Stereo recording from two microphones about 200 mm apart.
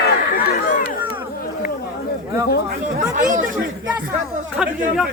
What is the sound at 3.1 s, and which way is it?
Chatter, 40° right (ahead or behind).